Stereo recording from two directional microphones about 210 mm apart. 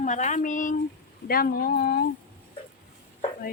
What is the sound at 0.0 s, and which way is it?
Speech, 35° left (ahead or behind).